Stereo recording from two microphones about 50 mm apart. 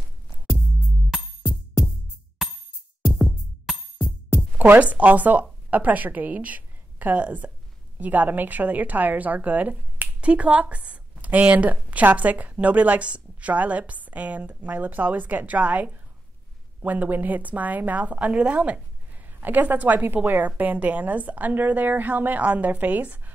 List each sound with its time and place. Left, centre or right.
4.7 s a woman's voice: right
19.2 s a woman's voice: right